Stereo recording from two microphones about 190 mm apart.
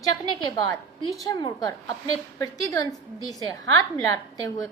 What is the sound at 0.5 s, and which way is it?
A woman's voice, 20° left (ahead or behind).